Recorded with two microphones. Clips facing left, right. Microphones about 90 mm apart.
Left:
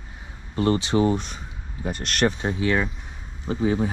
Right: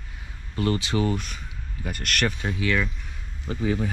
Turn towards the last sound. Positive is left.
turn(degrees=20)  # may be behind; listen again after turning